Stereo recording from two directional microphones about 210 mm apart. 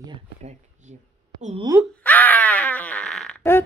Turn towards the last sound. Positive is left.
turn(degrees=10)  # may be behind; listen again after turning